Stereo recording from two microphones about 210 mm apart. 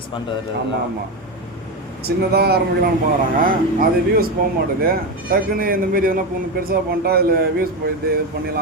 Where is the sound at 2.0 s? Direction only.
50° right (ahead or behind).